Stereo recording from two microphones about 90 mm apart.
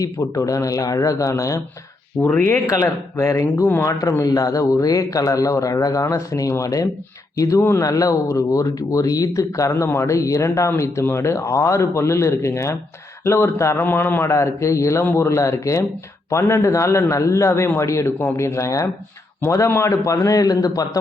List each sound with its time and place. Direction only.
0.0 s speech: 40° left (ahead or behind)
2.2 s speech: 5° left (ahead or behind)
2.6 s speech: 35° left (ahead or behind)
4.2 s speech: 40° left (ahead or behind)